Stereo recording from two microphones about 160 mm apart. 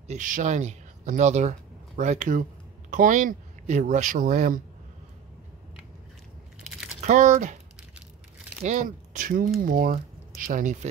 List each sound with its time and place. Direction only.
0.1 s speech: 50° right (ahead or behind)
7.1 s speech: 50° right (ahead or behind)
8.6 s speech: 50° right (ahead or behind)